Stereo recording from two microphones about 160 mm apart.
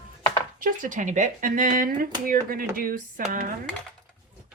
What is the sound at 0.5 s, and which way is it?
Speech, 55° right (ahead or behind).